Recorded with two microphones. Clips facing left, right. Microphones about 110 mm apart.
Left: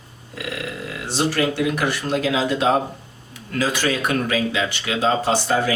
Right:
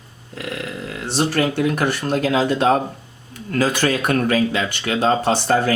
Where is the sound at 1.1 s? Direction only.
50° right (ahead or behind).